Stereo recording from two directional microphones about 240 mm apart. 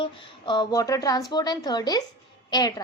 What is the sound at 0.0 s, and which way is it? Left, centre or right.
A woman's voice, centre.